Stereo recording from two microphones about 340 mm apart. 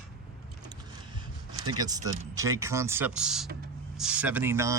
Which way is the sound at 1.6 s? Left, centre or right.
Centre.